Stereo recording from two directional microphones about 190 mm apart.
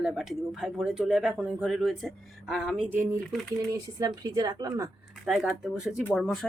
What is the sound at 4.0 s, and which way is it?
Speech, 20° right (ahead or behind).